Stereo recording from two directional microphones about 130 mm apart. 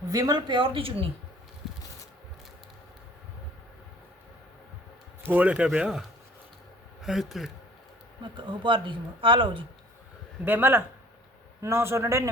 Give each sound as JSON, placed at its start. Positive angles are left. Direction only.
{"t": 0.1, "sound": "speech", "side_deg": -30}
{"t": 5.2, "sound": "speech", "side_deg": -15}
{"t": 8.2, "sound": "speech", "side_deg": -40}
{"t": 10.4, "sound": "a man's voice", "side_deg": -15}